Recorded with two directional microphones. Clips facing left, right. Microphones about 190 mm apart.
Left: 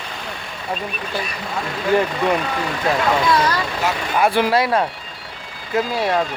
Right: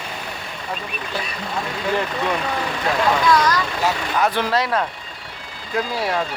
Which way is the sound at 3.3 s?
30° left (ahead or behind).